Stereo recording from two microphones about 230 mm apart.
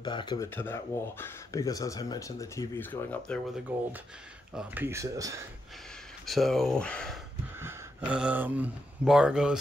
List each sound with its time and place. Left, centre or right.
0.0 s speech: centre
3.7 s speech: centre
6.2 s speech: centre